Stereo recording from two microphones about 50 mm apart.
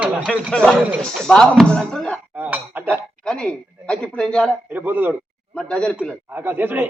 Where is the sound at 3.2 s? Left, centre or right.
Left.